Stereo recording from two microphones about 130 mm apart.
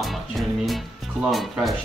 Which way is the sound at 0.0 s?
Centre (ahead or behind).